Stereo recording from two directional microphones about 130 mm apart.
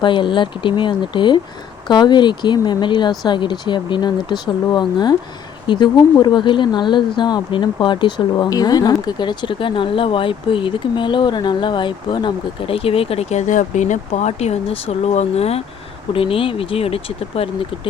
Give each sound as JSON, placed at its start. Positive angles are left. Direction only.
{"t": 0.0, "sound": "speech", "side_deg": 40}